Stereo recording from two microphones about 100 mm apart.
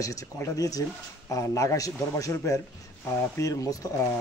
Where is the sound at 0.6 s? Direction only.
35° left (ahead or behind).